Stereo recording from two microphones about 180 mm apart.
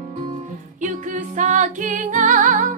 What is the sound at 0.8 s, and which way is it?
Music, 45° right (ahead or behind).